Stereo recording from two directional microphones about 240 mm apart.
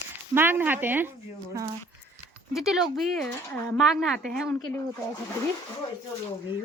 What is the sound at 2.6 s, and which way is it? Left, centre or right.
Speech, centre.